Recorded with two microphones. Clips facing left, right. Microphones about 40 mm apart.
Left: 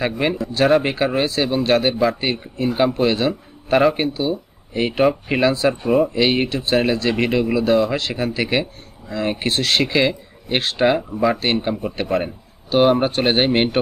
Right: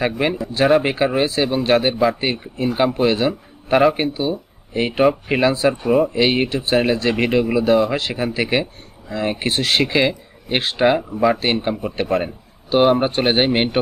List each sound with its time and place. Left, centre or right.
0.0 s a man's voice: centre
9.6 s speech: centre